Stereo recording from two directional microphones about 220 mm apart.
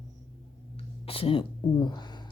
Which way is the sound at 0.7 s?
25° left (ahead or behind).